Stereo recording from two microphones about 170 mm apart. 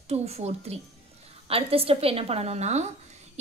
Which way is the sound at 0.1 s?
40° right (ahead or behind).